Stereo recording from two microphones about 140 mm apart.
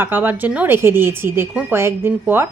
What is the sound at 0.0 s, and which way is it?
A woman's voice, 15° right (ahead or behind).